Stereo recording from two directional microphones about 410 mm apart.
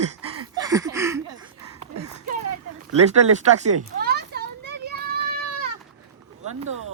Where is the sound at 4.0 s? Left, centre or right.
Right.